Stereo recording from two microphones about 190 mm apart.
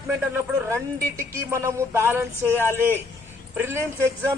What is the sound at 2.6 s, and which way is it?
Speech, 10° left (ahead or behind).